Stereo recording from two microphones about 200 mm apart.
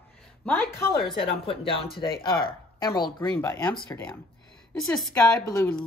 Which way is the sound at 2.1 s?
50° left (ahead or behind).